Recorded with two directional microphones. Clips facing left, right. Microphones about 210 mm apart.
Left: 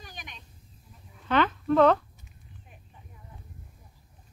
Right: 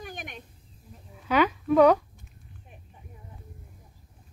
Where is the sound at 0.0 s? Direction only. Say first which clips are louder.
Right 7 dB; 50° right (ahead or behind).